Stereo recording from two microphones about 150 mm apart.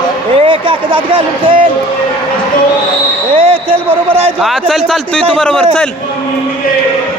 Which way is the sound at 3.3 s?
35° right (ahead or behind).